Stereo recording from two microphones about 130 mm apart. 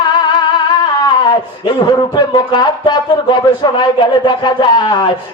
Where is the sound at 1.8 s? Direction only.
30° left (ahead or behind).